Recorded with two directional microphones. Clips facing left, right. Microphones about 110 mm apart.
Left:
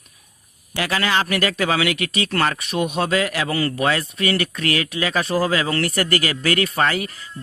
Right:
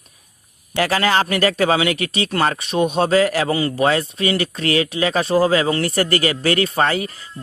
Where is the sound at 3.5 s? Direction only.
20° right (ahead or behind).